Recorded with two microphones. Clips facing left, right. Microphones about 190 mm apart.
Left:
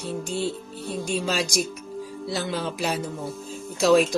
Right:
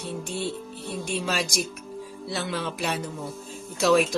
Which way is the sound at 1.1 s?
Centre (ahead or behind).